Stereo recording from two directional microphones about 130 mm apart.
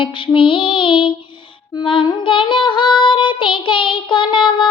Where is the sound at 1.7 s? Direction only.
40° left (ahead or behind).